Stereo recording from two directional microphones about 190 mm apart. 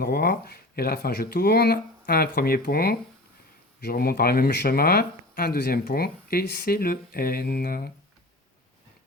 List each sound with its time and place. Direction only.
0.0 s speech: 55° left (ahead or behind)